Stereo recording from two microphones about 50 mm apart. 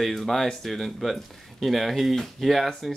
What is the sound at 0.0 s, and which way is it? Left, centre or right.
Speech, centre.